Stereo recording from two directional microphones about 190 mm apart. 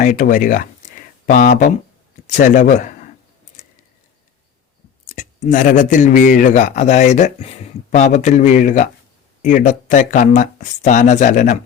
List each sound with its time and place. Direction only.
0.0 s speech: 45° left (ahead or behind)
5.0 s speech: 40° left (ahead or behind)